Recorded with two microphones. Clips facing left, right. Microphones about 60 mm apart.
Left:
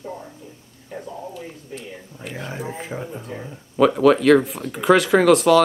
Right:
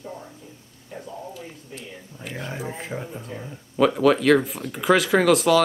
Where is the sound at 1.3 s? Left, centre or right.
Centre.